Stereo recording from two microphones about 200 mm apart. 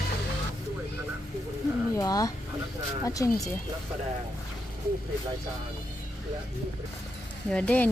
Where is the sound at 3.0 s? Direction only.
15° left (ahead or behind).